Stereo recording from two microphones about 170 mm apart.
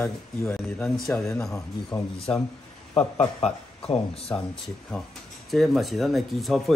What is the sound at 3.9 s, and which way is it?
Speech, 35° left (ahead or behind).